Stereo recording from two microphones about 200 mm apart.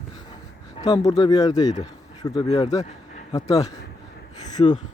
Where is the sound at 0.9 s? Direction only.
20° left (ahead or behind).